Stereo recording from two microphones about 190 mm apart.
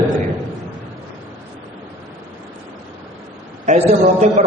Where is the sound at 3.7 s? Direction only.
40° right (ahead or behind).